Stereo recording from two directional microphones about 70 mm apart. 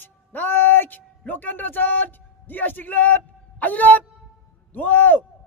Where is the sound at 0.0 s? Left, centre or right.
Left.